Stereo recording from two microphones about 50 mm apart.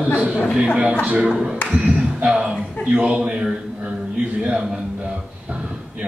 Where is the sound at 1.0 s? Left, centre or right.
Right.